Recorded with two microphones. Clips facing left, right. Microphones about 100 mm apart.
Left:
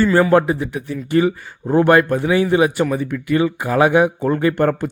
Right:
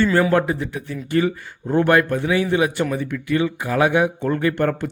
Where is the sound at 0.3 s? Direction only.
25° left (ahead or behind).